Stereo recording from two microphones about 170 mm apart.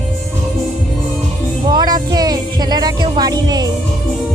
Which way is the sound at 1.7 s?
25° right (ahead or behind).